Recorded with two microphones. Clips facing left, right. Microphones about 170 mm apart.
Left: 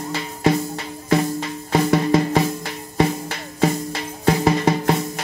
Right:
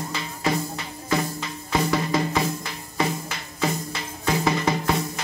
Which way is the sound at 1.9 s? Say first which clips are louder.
Left 6 dB; 40° left (ahead or behind).